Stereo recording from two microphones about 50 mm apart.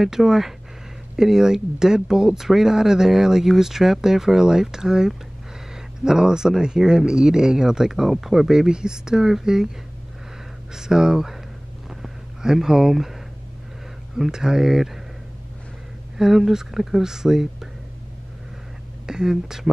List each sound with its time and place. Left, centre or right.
0.0 s speech: centre
10.7 s speech: centre
11.9 s a sound: centre
14.1 s speech: centre
16.2 s speech: centre
19.0 s speech: centre